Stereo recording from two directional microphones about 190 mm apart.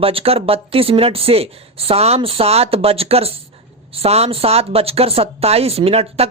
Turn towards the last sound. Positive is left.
turn(degrees=-30)  # may be behind; listen again after turning